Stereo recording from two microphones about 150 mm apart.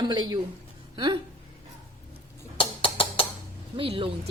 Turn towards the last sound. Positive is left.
turn(degrees=-35)  # may be behind; listen again after turning